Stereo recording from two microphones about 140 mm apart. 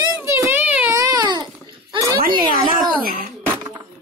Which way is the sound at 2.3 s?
30° right (ahead or behind).